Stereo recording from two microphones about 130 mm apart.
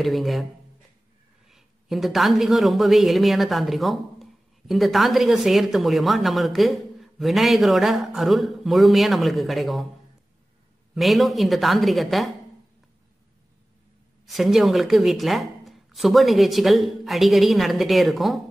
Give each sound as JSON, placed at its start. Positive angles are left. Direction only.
{"t": 0.0, "sound": "speech", "side_deg": 0}
{"t": 1.5, "sound": "speech", "side_deg": 0}
{"t": 11.0, "sound": "speech", "side_deg": 0}
{"t": 14.2, "sound": "speech", "side_deg": 0}